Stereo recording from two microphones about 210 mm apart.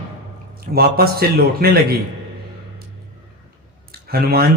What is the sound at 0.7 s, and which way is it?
A man's voice, 45° right (ahead or behind).